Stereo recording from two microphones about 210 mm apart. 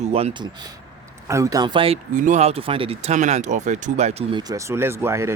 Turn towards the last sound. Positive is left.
turn(degrees=-10)  # may be behind; listen again after turning